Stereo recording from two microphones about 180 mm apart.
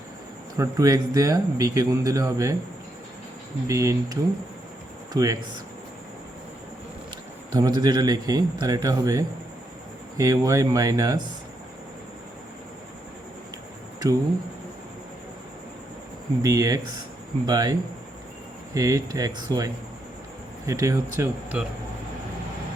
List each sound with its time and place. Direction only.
0.5 s a man's voice: 20° right (ahead or behind)
3.7 s speech: 15° right (ahead or behind)
7.5 s a man's voice: 20° right (ahead or behind)
16.4 s a man's voice: 15° right (ahead or behind)